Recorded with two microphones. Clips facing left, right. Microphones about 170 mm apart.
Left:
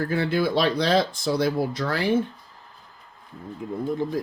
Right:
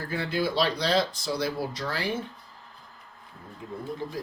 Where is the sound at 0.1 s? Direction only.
55° left (ahead or behind).